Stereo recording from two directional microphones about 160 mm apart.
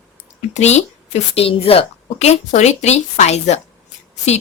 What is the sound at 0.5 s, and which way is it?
A woman's voice, 45° left (ahead or behind).